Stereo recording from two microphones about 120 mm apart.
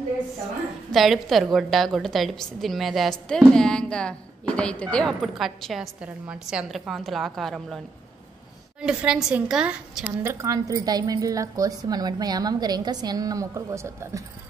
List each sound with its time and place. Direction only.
0.9 s a woman's voice: centre (ahead or behind)
8.8 s a woman's voice: 5° right (ahead or behind)
10.3 s a woman's voice: 25° right (ahead or behind)